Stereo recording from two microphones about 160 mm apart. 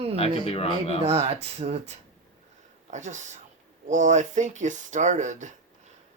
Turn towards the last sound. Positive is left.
turn(degrees=-50)  # may be behind; listen again after turning